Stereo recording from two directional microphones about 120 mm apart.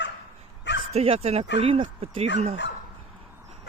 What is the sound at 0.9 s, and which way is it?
Speech, 60° right (ahead or behind).